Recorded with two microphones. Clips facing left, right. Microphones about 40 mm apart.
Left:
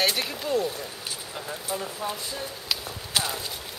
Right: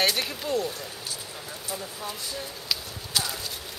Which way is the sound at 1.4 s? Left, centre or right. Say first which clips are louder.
Left 5 dB; left.